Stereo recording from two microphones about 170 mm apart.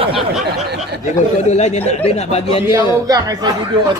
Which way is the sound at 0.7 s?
75° right (ahead or behind).